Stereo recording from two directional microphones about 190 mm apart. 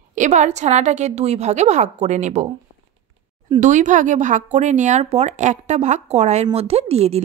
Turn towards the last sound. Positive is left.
turn(degrees=-30)  # may be behind; listen again after turning